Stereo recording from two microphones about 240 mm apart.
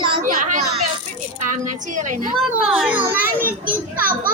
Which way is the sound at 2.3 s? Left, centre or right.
Centre.